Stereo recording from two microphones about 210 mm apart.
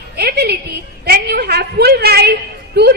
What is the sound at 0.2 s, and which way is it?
Music, 50° right (ahead or behind).